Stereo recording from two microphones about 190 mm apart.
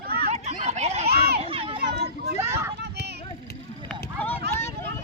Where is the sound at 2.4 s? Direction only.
15° right (ahead or behind).